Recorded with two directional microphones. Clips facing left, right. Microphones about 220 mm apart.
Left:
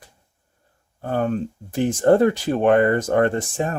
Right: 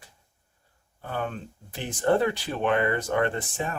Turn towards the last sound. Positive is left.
turn(degrees=45)  # may be behind; listen again after turning